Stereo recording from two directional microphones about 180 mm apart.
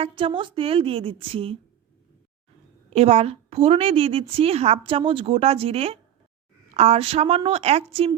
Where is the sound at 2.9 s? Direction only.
35° right (ahead or behind).